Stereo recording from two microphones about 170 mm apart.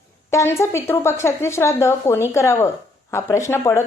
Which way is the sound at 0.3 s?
15° left (ahead or behind).